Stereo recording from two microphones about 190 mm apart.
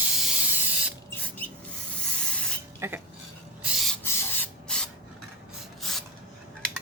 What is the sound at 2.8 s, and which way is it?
Dishes, 15° right (ahead or behind).